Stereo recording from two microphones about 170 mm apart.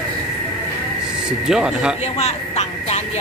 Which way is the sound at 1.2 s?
5° right (ahead or behind).